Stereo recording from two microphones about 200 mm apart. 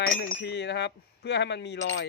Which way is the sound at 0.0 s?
55° left (ahead or behind).